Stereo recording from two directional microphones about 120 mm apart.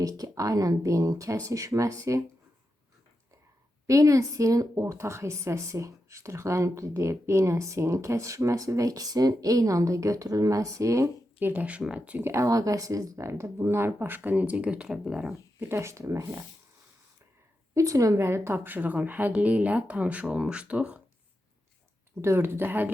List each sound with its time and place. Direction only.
0.0 s a woman's voice: 30° right (ahead or behind)
3.8 s a woman's voice: 25° right (ahead or behind); by 15.3 s 5° right (ahead or behind)
15.6 s a woman's voice: 20° right (ahead or behind)
17.7 s a woman's voice: 25° right (ahead or behind); by 21.0 s 10° right (ahead or behind)
22.2 s a woman's voice: 20° right (ahead or behind)